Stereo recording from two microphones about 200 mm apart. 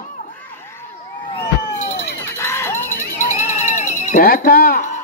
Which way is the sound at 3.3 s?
35° left (ahead or behind).